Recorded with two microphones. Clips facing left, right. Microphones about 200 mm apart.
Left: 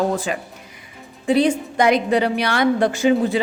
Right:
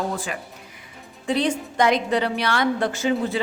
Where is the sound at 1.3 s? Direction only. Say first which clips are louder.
Left 6 dB; 10° left (ahead or behind).